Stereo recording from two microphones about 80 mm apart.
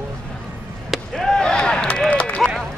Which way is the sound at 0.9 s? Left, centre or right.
Centre.